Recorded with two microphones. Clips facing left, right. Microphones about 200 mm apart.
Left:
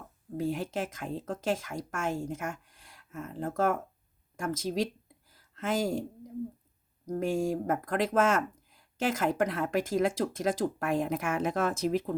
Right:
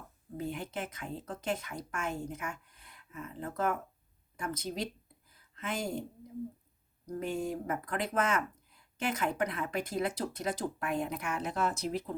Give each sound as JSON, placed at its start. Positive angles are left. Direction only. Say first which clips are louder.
{"t": 0.3, "sound": "speech", "louder": "left 6 dB", "side_deg": 90}
{"t": 3.1, "sound": "speech", "louder": "left 4 dB", "side_deg": 45}
{"t": 3.3, "sound": "speech", "louder": "left 5 dB", "side_deg": 90}
{"t": 7.2, "sound": "speech", "louder": "left 6 dB", "side_deg": 90}